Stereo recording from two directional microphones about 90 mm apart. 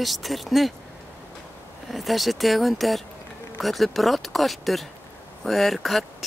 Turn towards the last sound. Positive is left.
turn(degrees=0)  # may be behind; listen again after turning